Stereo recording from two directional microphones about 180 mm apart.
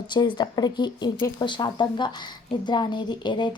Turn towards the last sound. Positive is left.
turn(degrees=25)  # may be behind; listen again after turning